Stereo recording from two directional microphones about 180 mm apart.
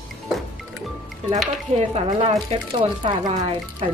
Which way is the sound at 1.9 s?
35° right (ahead or behind).